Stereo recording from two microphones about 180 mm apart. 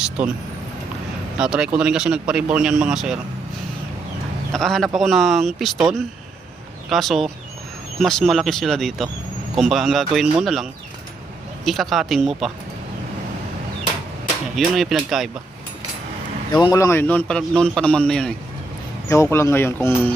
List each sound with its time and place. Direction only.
1.4 s speech: 5° right (ahead or behind)
4.5 s speech: centre (ahead or behind)
6.9 s speech: centre (ahead or behind)
14.5 s speech: centre (ahead or behind)
16.5 s a man's voice: 25° left (ahead or behind); by 18.3 s 5° left (ahead or behind)
19.0 s a man's voice: 15° left (ahead or behind)